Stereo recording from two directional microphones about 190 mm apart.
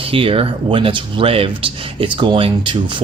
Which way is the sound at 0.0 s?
30° right (ahead or behind).